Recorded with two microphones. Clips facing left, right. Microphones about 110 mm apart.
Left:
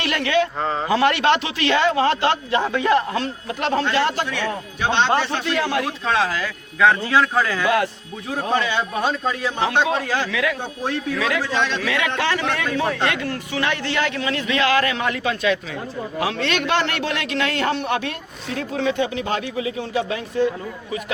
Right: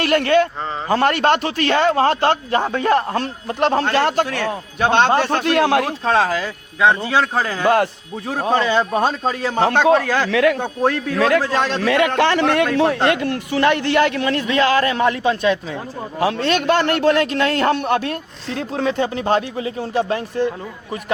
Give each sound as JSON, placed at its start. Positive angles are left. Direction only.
{"t": 0.0, "sound": "a man's voice", "side_deg": -50}
{"t": 6.1, "sound": "speech", "side_deg": -40}
{"t": 6.7, "sound": "a man's voice", "side_deg": -20}
{"t": 14.4, "sound": "a man's voice", "side_deg": -35}